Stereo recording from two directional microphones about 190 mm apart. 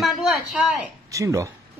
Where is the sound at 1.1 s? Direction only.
15° right (ahead or behind).